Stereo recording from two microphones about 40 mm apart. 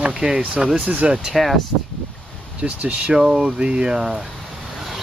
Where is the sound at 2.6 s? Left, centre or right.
Right.